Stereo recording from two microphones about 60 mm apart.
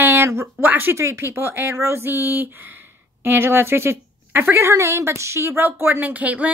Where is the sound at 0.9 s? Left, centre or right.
Right.